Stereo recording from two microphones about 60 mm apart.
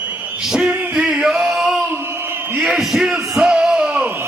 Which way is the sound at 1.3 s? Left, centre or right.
Centre.